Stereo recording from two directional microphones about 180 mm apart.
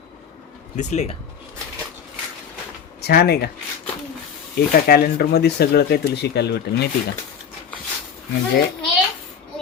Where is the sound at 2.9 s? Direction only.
60° left (ahead or behind).